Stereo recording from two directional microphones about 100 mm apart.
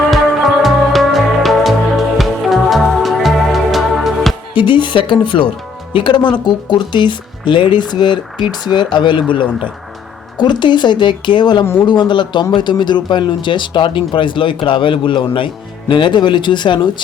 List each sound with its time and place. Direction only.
0.0 s music: centre (ahead or behind)
4.5 s a man's voice: 55° left (ahead or behind)
10.3 s a man's voice: 50° left (ahead or behind)
11.6 s speech: 20° left (ahead or behind)
11.9 s a man's voice: 50° left (ahead or behind)